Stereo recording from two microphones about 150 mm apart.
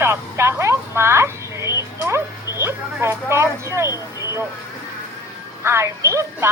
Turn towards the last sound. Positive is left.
turn(degrees=-20)  # may be behind; listen again after turning